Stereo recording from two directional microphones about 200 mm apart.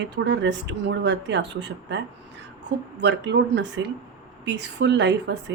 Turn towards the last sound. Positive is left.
turn(degrees=-60)  # may be behind; listen again after turning